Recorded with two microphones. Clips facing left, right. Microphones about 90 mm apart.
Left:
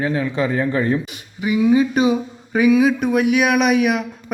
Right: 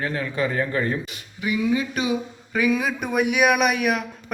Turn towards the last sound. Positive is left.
turn(degrees=0)  # may be behind; listen again after turning